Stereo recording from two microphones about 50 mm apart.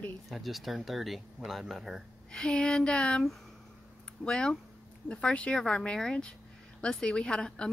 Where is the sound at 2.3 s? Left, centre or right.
Centre.